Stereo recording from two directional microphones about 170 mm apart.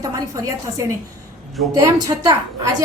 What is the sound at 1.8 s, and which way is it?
Speech, 20° right (ahead or behind).